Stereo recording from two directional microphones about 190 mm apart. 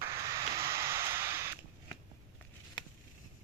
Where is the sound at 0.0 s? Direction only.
15° right (ahead or behind).